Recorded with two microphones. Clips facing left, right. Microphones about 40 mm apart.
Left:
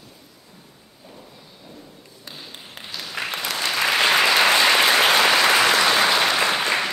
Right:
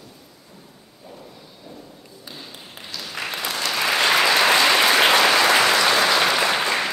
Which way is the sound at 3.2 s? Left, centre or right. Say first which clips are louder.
Left 1 dB; left.